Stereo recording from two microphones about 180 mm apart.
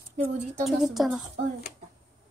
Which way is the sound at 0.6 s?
Centre (ahead or behind).